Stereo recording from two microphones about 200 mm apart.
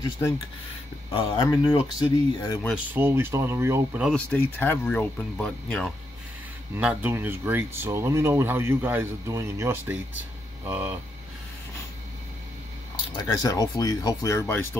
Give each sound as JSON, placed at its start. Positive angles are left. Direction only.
{"t": 1.1, "sound": "speech", "side_deg": 20}
{"t": 2.7, "sound": "speech", "side_deg": -10}
{"t": 4.0, "sound": "speech", "side_deg": 5}
{"t": 6.7, "sound": "speech", "side_deg": -10}
{"t": 13.1, "sound": "speech", "side_deg": 20}